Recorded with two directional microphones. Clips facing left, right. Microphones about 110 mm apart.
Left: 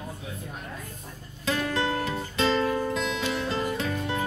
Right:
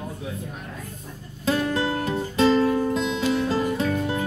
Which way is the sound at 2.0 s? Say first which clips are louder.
Right 6 dB; 35° right (ahead or behind).